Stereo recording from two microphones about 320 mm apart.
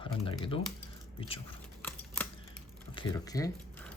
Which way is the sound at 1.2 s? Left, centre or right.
Centre.